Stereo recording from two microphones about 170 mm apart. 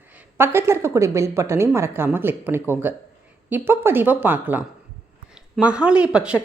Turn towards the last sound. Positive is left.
turn(degrees=-5)  # may be behind; listen again after turning